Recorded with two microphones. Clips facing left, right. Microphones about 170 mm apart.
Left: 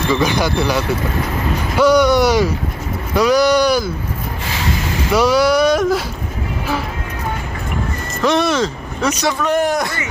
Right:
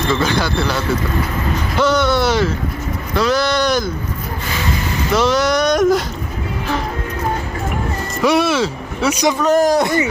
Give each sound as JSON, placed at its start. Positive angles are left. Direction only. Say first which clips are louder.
{"t": 0.1, "sound": "speech", "louder": "left 2 dB", "side_deg": 15}
{"t": 1.8, "sound": "speech", "louder": "left 4 dB", "side_deg": 10}
{"t": 5.1, "sound": "speech", "louder": "left 2 dB", "side_deg": 10}
{"t": 8.2, "sound": "speech", "louder": "right 1 dB", "side_deg": -10}
{"t": 9.4, "sound": "a man's voice", "louder": "right 4 dB", "side_deg": -40}